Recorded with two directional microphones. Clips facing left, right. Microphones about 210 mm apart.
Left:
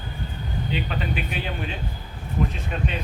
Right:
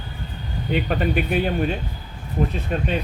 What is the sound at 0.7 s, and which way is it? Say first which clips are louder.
Speech: right 7 dB; 50° right (ahead or behind).